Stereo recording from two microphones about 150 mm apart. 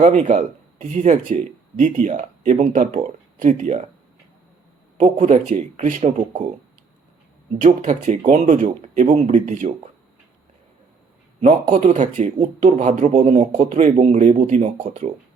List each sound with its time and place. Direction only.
0.0 s speech: 55° right (ahead or behind)
4.9 s speech: 55° right (ahead or behind)
7.6 s speech: 55° right (ahead or behind)
11.4 s speech: 55° right (ahead or behind)